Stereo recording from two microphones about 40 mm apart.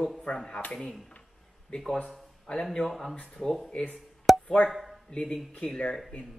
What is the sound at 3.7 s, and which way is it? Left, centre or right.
Speech, left.